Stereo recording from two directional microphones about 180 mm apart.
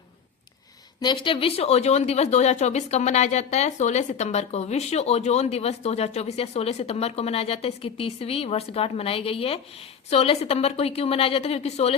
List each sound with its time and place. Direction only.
1.0 s a woman's voice: 25° left (ahead or behind)